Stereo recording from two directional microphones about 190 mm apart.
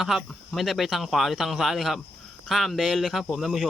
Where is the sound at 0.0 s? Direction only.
Centre (ahead or behind).